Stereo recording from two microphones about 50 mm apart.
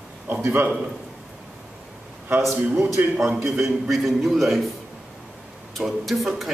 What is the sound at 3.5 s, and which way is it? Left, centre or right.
A man's voice, centre.